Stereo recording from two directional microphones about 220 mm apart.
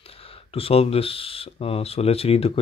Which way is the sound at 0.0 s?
25° left (ahead or behind).